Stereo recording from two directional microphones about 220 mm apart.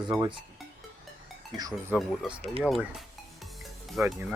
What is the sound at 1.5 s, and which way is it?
Speech, 15° right (ahead or behind).